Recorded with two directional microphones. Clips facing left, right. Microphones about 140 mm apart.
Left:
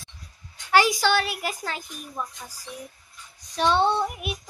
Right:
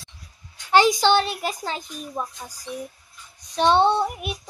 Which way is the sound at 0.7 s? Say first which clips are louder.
Right 3 dB; 25° right (ahead or behind).